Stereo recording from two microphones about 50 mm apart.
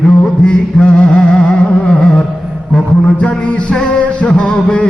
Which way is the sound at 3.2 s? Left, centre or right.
Left.